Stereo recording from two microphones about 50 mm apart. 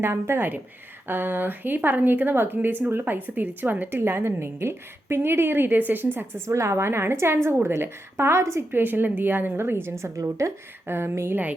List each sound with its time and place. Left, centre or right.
0.0 s a woman's voice: right
6.1 s a woman's voice: right
8.7 s a woman's voice: right
10.8 s a woman's voice: right